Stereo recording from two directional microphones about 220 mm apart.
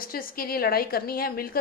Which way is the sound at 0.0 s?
40° left (ahead or behind).